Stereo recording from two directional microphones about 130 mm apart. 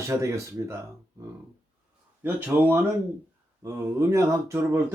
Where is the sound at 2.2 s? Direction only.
15° right (ahead or behind).